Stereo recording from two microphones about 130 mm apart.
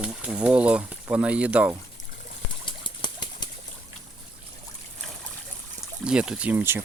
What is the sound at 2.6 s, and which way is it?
Bird flight, 40° left (ahead or behind).